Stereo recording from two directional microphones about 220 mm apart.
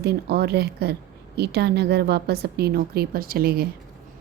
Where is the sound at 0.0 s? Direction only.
45° right (ahead or behind).